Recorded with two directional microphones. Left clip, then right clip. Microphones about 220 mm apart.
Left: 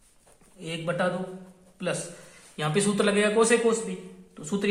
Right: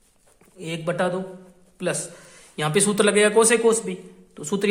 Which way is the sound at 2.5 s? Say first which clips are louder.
Right 5 dB; 45° right (ahead or behind).